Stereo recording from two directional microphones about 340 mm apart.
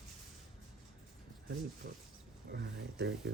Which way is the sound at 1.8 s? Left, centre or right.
Right.